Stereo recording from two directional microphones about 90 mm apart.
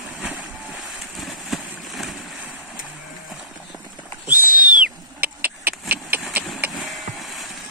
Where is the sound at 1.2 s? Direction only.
Centre (ahead or behind).